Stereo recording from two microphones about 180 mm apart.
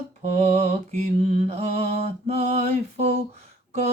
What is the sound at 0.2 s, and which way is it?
Mantra, 35° right (ahead or behind).